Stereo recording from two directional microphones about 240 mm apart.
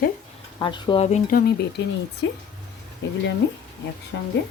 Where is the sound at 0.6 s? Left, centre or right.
Centre; by 1.8 s left.